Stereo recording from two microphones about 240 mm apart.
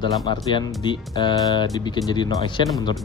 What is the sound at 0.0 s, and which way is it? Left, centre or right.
Speech, centre.